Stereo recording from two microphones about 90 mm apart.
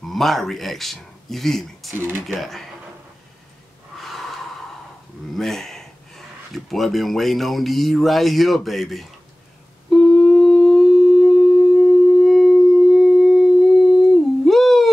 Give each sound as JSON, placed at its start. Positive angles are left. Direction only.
{"t": 0.0, "sound": "speech", "side_deg": 0}
{"t": 2.0, "sound": "speech", "side_deg": -25}
{"t": 2.2, "sound": "speech", "side_deg": 0}
{"t": 4.0, "sound": "gasp", "side_deg": 0}
{"t": 5.3, "sound": "speech", "side_deg": 5}
{"t": 9.8, "sound": "humming", "side_deg": 5}
{"t": 12.3, "sound": "a sound", "side_deg": 5}